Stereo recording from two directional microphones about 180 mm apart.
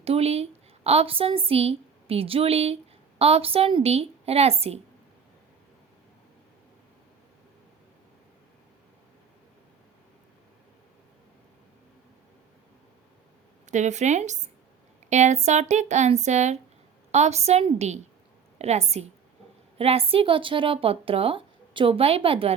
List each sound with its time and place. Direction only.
0.0 s a woman's voice: 35° right (ahead or behind)
13.7 s speech: 40° right (ahead or behind)